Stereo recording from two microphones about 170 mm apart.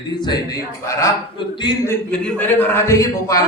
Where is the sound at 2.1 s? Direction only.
5° left (ahead or behind).